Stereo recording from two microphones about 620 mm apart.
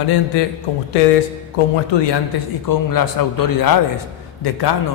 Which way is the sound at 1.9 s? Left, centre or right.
Left.